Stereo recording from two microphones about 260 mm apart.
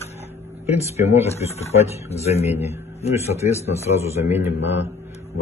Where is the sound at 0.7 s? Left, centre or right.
Left.